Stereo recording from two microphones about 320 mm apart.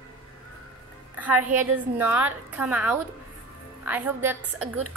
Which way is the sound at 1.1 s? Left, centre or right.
Centre.